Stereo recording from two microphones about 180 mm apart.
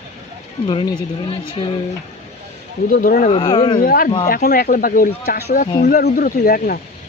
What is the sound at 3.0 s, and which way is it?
Speech, 45° left (ahead or behind).